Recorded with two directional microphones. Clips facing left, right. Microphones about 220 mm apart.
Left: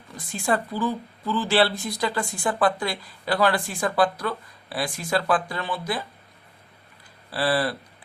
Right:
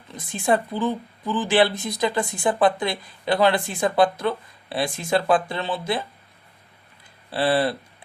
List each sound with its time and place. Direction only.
0.1 s speech: 20° right (ahead or behind)
7.3 s speech: 25° right (ahead or behind)